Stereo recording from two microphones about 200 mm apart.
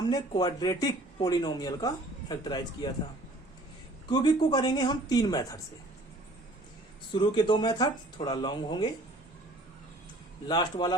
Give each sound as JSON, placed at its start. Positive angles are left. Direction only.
{"t": 0.0, "sound": "speech", "side_deg": 20}
{"t": 4.1, "sound": "speech", "side_deg": 20}
{"t": 7.1, "sound": "speech", "side_deg": 25}
{"t": 10.5, "sound": "speech", "side_deg": 20}